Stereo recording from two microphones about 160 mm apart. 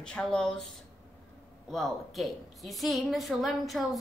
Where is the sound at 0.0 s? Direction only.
5° left (ahead or behind).